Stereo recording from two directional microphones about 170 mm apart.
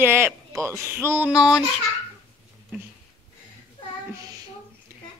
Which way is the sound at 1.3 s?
5° right (ahead or behind).